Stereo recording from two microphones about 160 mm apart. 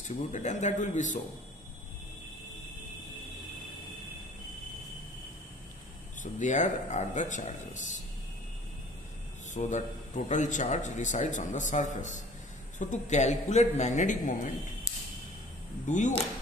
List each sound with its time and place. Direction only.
0.3 s a man's voice: 45° left (ahead or behind)
6.2 s a man's voice: 50° left (ahead or behind)
9.5 s a man's voice: 50° left (ahead or behind)
15.9 s a man's voice: 50° left (ahead or behind)